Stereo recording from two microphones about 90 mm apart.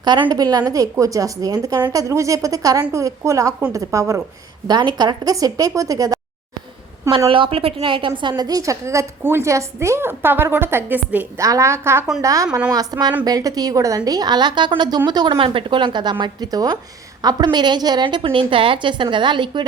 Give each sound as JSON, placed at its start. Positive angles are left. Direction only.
{"t": 0.0, "sound": "a woman's voice", "side_deg": -55}
{"t": 4.7, "sound": "a woman's voice", "side_deg": -50}
{"t": 7.3, "sound": "a woman's voice", "side_deg": -80}
{"t": 8.4, "sound": "a woman's voice", "side_deg": -40}
{"t": 11.3, "sound": "a woman's voice", "side_deg": -35}
{"t": 15.4, "sound": "a woman's voice", "side_deg": -75}